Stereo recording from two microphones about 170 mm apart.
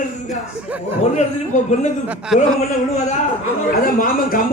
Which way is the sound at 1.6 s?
40° left (ahead or behind).